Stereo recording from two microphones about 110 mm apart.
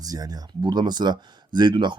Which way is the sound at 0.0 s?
35° right (ahead or behind).